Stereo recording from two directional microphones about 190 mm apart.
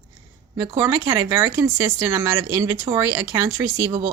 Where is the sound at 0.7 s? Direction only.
15° right (ahead or behind).